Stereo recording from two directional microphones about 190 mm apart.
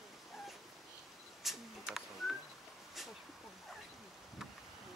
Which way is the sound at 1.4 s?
Centre (ahead or behind).